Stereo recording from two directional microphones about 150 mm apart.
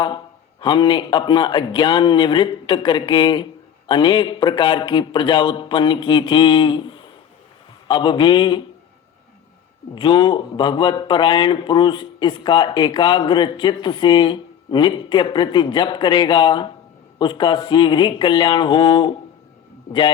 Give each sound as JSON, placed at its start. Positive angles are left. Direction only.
{"t": 0.6, "sound": "speech", "side_deg": 30}
{"t": 9.9, "sound": "speech", "side_deg": 30}